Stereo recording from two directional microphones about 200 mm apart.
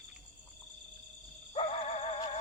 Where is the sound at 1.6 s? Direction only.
30° left (ahead or behind).